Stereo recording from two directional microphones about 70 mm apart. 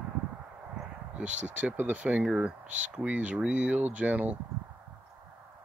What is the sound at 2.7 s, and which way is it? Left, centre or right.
Speech, centre.